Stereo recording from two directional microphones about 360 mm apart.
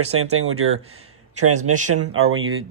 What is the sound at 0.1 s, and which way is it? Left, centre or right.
Speech, right.